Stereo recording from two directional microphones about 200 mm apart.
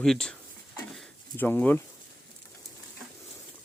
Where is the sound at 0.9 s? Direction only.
10° left (ahead or behind).